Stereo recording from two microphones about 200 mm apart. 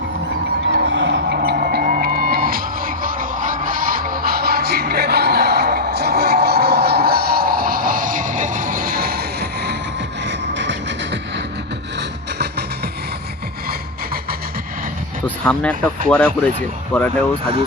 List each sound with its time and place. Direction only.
0.9 s music: 65° right (ahead or behind)
11.9 s vehicle: 55° right (ahead or behind)
13.7 s music: 50° right (ahead or behind)
16.0 s speech: 5° left (ahead or behind)